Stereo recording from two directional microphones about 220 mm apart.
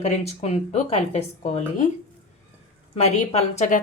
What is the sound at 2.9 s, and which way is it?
Speech, 30° left (ahead or behind).